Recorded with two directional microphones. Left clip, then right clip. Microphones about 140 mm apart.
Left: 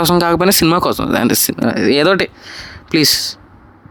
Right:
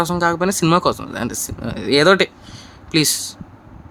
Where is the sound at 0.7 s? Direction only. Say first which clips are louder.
Left 3 dB; 55° left (ahead or behind).